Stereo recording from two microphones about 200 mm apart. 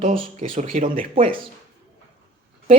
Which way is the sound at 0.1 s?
30° right (ahead or behind).